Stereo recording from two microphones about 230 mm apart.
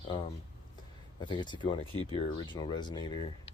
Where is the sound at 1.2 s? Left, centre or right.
Centre.